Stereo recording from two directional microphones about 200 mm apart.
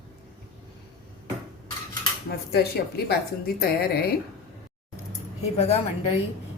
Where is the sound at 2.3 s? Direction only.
50° left (ahead or behind).